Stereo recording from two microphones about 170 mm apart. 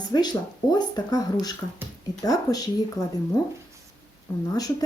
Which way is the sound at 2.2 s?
20° left (ahead or behind).